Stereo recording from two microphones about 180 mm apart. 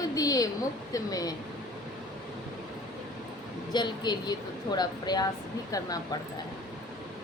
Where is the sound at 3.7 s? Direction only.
25° left (ahead or behind).